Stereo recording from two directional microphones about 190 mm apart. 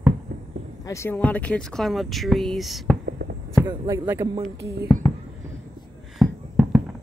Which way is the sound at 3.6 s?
20° right (ahead or behind).